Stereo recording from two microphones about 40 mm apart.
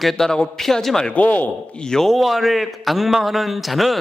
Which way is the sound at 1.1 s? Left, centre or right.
Left.